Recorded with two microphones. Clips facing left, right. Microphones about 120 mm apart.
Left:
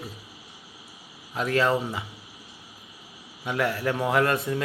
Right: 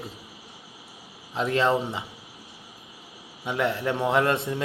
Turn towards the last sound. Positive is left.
turn(degrees=-25)  # may be behind; listen again after turning